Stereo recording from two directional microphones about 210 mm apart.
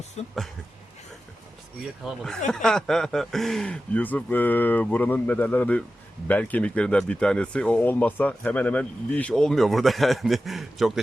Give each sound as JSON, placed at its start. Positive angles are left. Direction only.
{"t": 0.2, "sound": "speech", "side_deg": 30}
{"t": 2.0, "sound": "speech", "side_deg": 0}